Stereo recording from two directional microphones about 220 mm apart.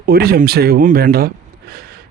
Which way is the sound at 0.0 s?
45° right (ahead or behind).